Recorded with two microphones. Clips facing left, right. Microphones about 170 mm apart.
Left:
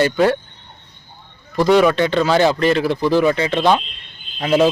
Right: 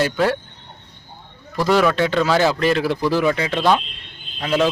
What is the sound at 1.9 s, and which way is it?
Speech, 5° right (ahead or behind).